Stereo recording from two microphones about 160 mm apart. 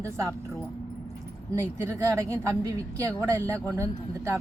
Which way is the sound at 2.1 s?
20° right (ahead or behind).